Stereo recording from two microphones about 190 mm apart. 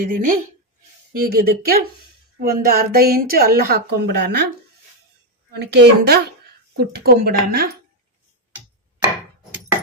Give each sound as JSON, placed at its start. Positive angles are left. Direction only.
{"t": 0.0, "sound": "a woman's voice", "side_deg": -45}
{"t": 5.5, "sound": "speech", "side_deg": -65}